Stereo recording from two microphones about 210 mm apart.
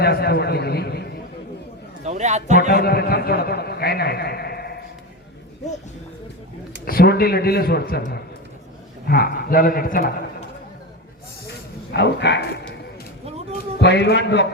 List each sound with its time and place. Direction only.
0.0 s a man's voice: 50° left (ahead or behind)
2.0 s a man's voice: 35° right (ahead or behind)
2.6 s a man's voice: 50° left (ahead or behind)
6.8 s a man's voice: 45° left (ahead or behind)
11.9 s speech: 55° left (ahead or behind)
13.7 s a man's voice: 55° left (ahead or behind)